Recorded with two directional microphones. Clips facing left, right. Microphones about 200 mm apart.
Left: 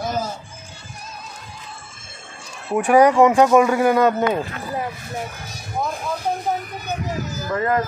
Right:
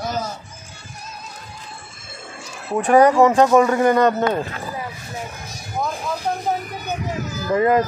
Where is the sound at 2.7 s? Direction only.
10° left (ahead or behind).